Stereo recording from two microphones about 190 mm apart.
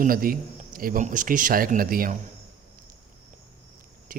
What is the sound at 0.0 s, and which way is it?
A man's voice, 50° right (ahead or behind).